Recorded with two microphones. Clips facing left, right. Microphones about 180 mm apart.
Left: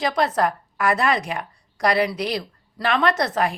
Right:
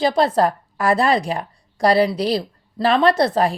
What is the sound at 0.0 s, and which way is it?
A woman's voice, 30° right (ahead or behind).